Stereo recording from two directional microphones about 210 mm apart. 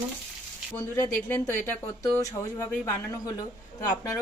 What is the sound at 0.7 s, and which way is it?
Speech, 20° left (ahead or behind).